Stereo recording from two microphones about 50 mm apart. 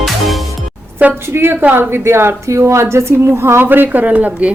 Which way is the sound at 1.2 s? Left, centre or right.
Right.